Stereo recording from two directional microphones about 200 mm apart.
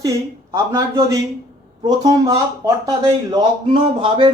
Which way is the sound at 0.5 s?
15° right (ahead or behind).